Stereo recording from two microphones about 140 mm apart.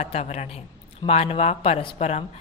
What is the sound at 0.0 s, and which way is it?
A woman's voice, 50° left (ahead or behind).